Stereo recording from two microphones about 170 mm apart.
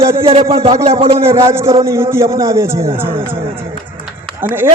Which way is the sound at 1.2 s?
15° right (ahead or behind).